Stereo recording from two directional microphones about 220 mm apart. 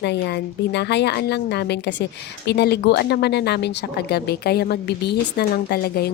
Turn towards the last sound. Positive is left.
turn(degrees=45)  # may be behind; listen again after turning